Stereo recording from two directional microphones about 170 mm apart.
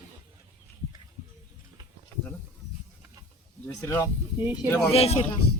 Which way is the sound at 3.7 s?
20° left (ahead or behind).